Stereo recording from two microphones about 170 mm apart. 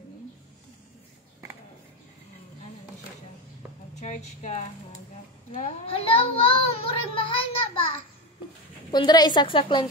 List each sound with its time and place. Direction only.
3.9 s a woman's voice: 45° left (ahead or behind)
5.9 s a child's voice: 35° left (ahead or behind)
8.9 s a woman's voice: 25° left (ahead or behind)